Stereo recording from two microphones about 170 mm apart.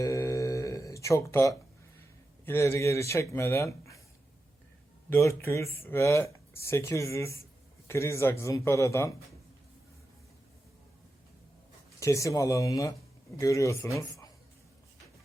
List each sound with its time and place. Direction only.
0.0 s music: 20° left (ahead or behind)
2.4 s speech: 15° left (ahead or behind)
5.0 s speech: 15° left (ahead or behind)
11.9 s speech: 20° left (ahead or behind)